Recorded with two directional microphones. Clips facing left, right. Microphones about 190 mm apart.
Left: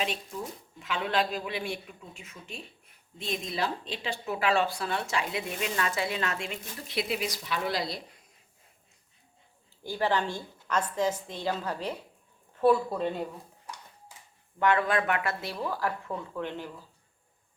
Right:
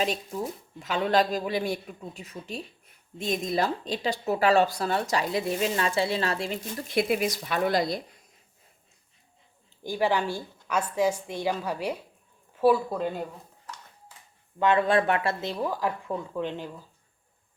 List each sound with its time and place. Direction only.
0.0 s speech: 40° right (ahead or behind)
6.8 s speech: 50° right (ahead or behind)
9.8 s a woman's voice: 15° right (ahead or behind)
14.6 s speech: 25° right (ahead or behind)